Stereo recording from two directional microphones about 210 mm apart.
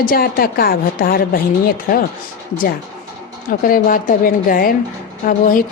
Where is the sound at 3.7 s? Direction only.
40° left (ahead or behind).